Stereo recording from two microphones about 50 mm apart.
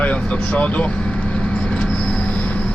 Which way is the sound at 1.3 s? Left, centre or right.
Left.